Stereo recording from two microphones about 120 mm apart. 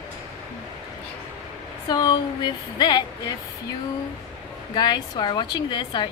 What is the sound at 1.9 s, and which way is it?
A woman's voice, 35° left (ahead or behind).